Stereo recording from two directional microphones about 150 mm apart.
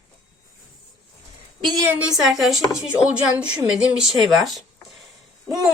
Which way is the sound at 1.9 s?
10° right (ahead or behind).